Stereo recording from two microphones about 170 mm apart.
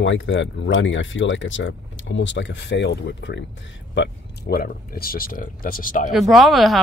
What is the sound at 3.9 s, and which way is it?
Speech, 65° left (ahead or behind).